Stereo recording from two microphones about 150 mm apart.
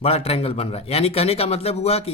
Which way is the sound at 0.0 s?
40° left (ahead or behind).